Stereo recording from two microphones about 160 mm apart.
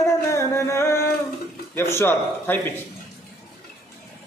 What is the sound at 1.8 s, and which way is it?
Speech, 15° left (ahead or behind).